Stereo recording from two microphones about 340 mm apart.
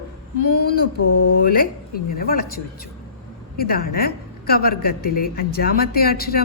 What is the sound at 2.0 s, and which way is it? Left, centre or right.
A woman's voice, left.